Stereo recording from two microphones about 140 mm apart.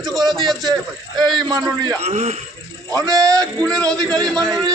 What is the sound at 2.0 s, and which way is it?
Speech, 50° right (ahead or behind).